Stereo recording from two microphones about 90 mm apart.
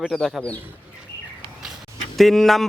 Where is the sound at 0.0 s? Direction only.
Centre (ahead or behind).